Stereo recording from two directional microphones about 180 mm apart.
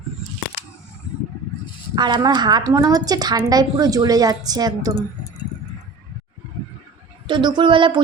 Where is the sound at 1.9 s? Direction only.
25° right (ahead or behind).